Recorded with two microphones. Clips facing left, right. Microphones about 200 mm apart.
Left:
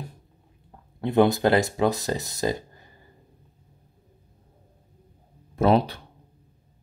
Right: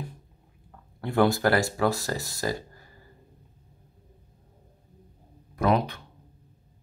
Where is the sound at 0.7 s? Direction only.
20° left (ahead or behind).